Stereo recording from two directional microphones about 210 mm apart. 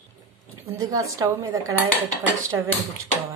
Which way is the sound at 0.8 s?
15° right (ahead or behind).